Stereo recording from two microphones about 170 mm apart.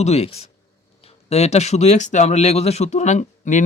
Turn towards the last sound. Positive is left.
turn(degrees=45)  # may be behind; listen again after turning